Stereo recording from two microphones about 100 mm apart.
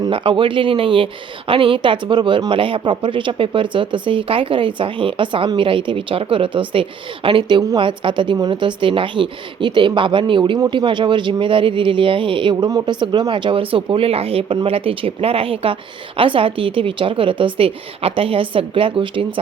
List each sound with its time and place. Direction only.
0.1 s speech: 60° right (ahead or behind)
12.6 s speech: 45° right (ahead or behind)